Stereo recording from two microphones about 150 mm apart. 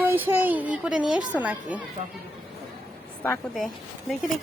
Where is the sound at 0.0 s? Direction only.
15° right (ahead or behind).